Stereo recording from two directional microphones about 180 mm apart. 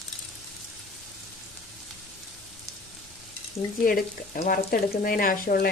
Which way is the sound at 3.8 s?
50° left (ahead or behind).